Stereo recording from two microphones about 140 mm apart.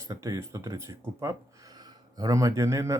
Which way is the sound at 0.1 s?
25° right (ahead or behind).